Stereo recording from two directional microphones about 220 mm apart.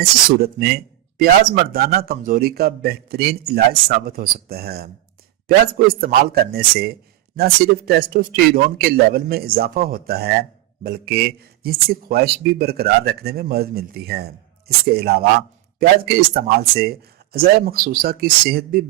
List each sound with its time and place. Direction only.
0.0 s a man's voice: 45° right (ahead or behind)